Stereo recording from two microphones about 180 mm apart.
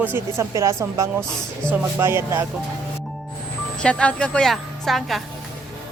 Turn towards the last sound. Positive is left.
turn(degrees=0)  # may be behind; listen again after turning